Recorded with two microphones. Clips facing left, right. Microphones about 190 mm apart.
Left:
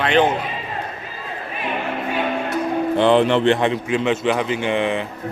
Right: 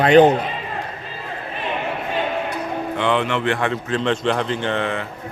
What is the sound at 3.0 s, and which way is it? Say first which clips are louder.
A man's voice: left 6 dB; 35° left (ahead or behind).